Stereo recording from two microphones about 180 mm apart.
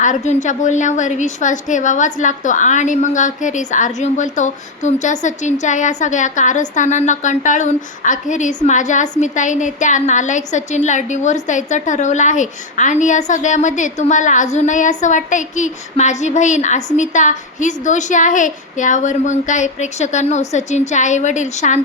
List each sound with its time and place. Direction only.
0.0 s a woman's voice: 45° left (ahead or behind)